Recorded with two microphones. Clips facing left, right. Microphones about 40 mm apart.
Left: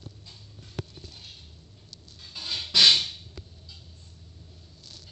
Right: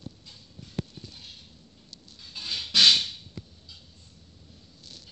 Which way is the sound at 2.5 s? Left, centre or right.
Left.